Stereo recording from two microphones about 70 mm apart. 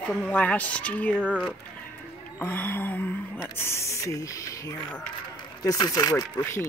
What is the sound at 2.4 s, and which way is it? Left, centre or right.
Speech, left.